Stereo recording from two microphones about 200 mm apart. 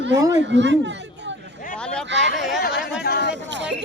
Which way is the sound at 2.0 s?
60° right (ahead or behind).